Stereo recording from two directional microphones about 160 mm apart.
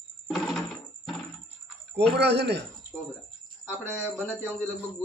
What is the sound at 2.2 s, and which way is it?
Speech, 90° right.